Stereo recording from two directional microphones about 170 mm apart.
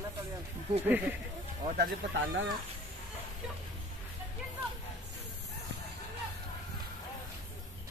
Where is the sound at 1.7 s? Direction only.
90° right.